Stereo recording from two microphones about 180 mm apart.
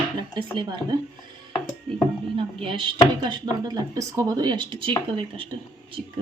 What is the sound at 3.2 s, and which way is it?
Speech, 20° right (ahead or behind).